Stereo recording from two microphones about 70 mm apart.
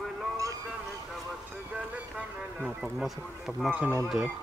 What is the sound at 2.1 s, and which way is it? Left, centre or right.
Speech, centre.